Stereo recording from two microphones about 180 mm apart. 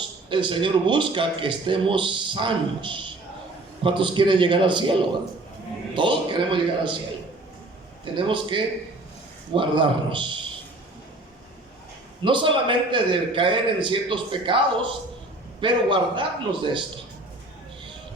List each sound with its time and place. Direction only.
0.3 s a man's voice: 25° right (ahead or behind)
8.0 s a man's voice: 30° right (ahead or behind)
12.2 s a man's voice: 25° right (ahead or behind)